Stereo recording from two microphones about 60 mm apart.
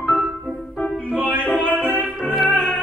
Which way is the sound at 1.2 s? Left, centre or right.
Left.